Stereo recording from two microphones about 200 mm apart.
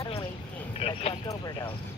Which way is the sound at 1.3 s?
20° left (ahead or behind).